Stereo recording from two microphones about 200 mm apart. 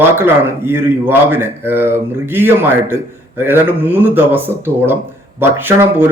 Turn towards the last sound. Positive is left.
turn(degrees=-10)  # may be behind; listen again after turning